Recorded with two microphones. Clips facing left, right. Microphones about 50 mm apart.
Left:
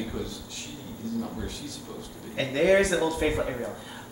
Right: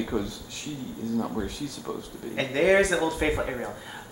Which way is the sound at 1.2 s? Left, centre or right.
Right.